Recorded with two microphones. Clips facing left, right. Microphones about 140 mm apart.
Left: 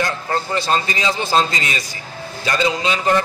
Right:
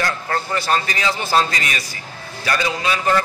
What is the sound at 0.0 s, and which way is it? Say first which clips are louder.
A man's voice: left 1 dB; 20° left (ahead or behind).